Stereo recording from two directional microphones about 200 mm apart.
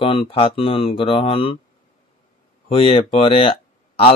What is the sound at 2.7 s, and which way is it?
Speech, 30° left (ahead or behind).